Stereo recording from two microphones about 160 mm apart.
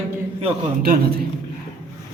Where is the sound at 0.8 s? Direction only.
65° right (ahead or behind).